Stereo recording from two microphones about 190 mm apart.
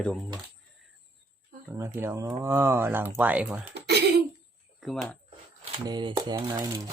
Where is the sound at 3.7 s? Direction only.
60° right (ahead or behind).